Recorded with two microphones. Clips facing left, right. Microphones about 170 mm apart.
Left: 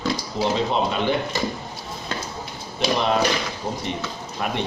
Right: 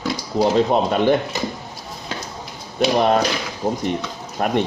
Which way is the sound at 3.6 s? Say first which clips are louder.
Right 9 dB; 75° right (ahead or behind).